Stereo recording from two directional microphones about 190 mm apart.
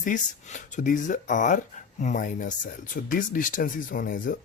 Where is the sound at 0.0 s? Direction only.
40° left (ahead or behind).